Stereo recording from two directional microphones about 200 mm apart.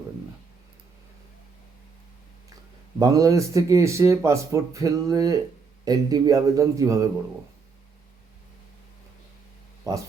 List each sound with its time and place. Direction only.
3.0 s speech: 15° right (ahead or behind)
9.9 s speech: 15° right (ahead or behind)